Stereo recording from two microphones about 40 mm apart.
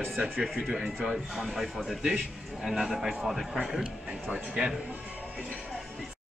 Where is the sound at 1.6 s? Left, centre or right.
Centre.